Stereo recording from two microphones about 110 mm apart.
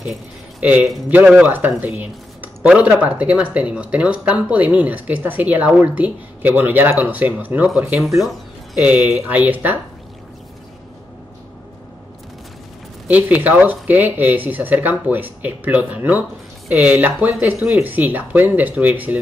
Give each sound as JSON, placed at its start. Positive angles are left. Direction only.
{"t": 0.0, "sound": "a sound", "side_deg": -10}
{"t": 1.1, "sound": "speech", "side_deg": -15}
{"t": 8.8, "sound": "speech", "side_deg": -10}
{"t": 13.1, "sound": "speech", "side_deg": -15}